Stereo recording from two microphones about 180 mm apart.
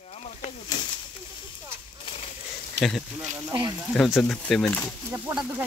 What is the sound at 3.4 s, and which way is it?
Speech, 20° right (ahead or behind).